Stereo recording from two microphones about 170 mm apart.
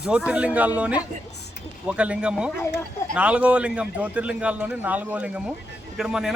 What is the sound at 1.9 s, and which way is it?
A man's voice, 5° right (ahead or behind).